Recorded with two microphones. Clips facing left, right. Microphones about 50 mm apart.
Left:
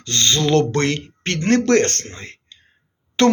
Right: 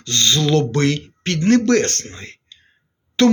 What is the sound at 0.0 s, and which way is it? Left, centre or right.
Speech, left.